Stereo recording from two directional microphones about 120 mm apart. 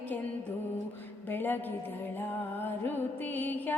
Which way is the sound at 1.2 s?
15° left (ahead or behind).